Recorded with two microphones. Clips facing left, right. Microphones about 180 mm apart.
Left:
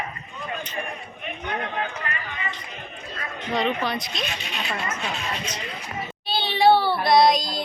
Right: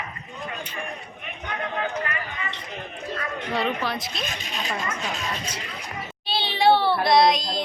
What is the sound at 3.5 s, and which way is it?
Speech, 5° right (ahead or behind).